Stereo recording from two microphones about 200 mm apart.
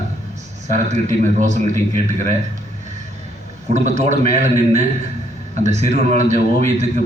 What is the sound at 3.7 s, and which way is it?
A man's voice, 35° right (ahead or behind).